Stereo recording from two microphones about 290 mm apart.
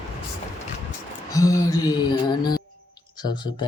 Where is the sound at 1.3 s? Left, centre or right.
Centre.